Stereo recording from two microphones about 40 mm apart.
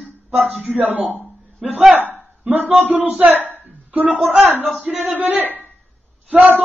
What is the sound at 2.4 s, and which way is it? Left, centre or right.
Speech, right.